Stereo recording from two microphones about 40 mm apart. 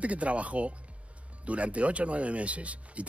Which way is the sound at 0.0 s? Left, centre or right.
Right.